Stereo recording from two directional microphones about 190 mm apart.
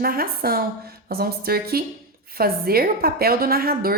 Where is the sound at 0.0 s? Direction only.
50° right (ahead or behind).